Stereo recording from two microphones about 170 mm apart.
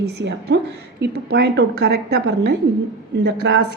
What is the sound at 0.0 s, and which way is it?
A woman's voice, 80° right.